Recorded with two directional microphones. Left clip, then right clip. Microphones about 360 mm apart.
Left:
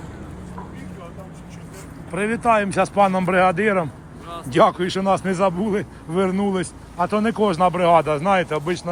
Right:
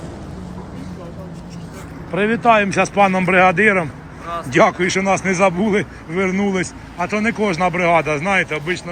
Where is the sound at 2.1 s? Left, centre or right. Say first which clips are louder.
Right 5 dB; centre.